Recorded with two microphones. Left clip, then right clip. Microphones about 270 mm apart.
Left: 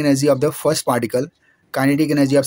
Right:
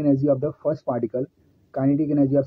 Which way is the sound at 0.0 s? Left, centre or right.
Left.